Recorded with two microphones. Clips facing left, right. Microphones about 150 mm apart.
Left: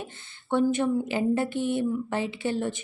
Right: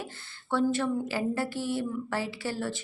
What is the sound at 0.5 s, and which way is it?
Speech, 20° left (ahead or behind).